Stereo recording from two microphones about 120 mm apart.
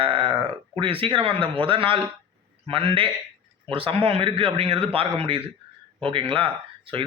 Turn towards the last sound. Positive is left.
turn(degrees=-50)  # may be behind; listen again after turning